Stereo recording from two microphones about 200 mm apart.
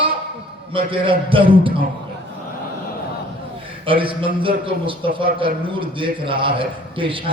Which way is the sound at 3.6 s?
25° right (ahead or behind).